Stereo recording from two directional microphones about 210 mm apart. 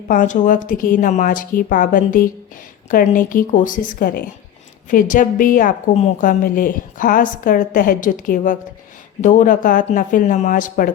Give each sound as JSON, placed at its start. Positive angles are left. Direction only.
{"t": 0.1, "sound": "a woman's voice", "side_deg": 40}